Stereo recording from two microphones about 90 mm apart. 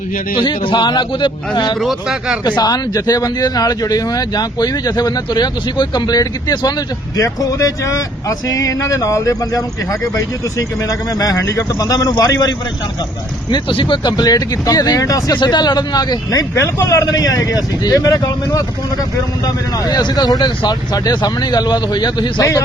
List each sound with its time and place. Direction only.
0.3 s speech: 65° left (ahead or behind)
1.8 s speech: 5° right (ahead or behind)
2.6 s speech: 50° left (ahead or behind)
7.2 s speech: 40° left (ahead or behind)
13.5 s speech: 65° left (ahead or behind); by 22.6 s 40° left (ahead or behind)